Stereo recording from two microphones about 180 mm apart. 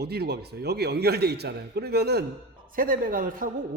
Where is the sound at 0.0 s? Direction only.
65° right (ahead or behind).